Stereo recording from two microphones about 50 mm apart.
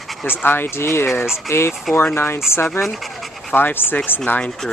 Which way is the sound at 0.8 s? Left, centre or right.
Left.